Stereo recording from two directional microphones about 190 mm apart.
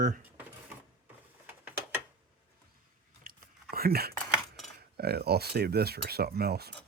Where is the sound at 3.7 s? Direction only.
55° right (ahead or behind).